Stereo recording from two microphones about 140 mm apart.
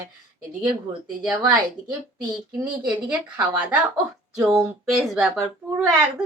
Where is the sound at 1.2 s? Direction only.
5° right (ahead or behind).